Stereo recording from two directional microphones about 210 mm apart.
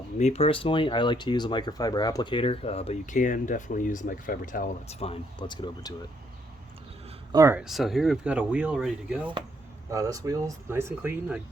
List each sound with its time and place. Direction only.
0.2 s speech: 30° left (ahead or behind)
4.9 s speech: 25° left (ahead or behind)
7.3 s speech: 10° right (ahead or behind)
9.9 s speech: 15° right (ahead or behind)